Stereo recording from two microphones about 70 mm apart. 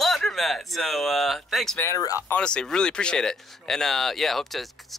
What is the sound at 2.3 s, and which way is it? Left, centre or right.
Speech, centre.